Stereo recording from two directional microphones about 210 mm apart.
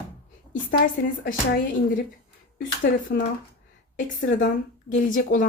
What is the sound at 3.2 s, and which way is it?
A woman's voice, 45° left (ahead or behind).